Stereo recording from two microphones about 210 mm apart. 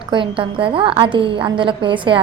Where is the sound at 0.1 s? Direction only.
25° right (ahead or behind).